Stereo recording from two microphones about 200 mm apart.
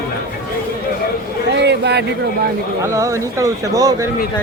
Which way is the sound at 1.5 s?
60° right (ahead or behind).